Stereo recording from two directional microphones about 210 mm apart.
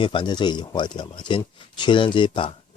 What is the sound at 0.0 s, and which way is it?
Speech, 20° left (ahead or behind).